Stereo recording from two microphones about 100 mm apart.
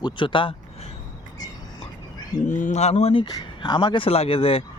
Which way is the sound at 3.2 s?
50° left (ahead or behind).